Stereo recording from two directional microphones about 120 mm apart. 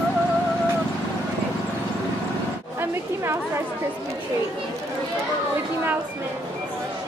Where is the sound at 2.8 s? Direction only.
20° right (ahead or behind).